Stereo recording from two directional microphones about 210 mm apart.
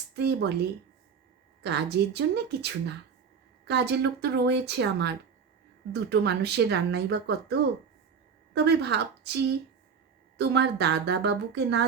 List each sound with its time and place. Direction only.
0.2 s speech: 55° right (ahead or behind)
1.6 s speech: 50° right (ahead or behind)